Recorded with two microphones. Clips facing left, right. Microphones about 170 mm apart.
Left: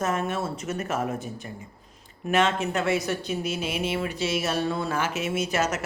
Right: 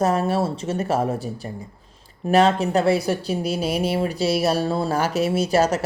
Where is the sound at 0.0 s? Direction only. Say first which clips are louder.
Right 7 dB; 35° right (ahead or behind).